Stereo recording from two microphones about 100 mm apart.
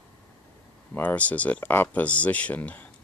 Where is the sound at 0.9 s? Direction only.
15° left (ahead or behind).